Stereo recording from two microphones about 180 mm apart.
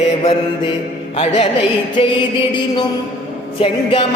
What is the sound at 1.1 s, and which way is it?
Music, 35° left (ahead or behind).